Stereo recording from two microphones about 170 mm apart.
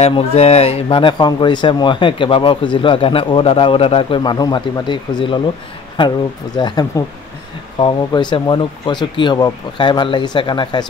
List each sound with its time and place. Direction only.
0.0 s speech: 35° left (ahead or behind)